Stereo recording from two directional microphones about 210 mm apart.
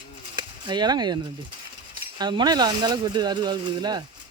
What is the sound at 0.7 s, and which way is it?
Speech, 20° right (ahead or behind).